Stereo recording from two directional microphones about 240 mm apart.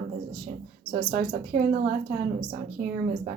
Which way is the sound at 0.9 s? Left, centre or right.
Right.